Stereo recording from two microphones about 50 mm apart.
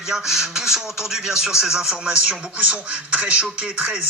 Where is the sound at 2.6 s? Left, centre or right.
Right.